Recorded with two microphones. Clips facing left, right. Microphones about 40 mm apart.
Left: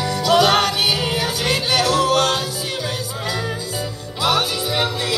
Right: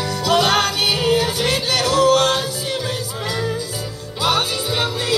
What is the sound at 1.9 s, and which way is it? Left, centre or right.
Music, centre.